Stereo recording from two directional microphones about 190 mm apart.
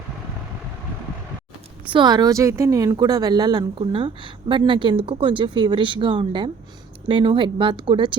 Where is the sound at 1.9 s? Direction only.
25° right (ahead or behind).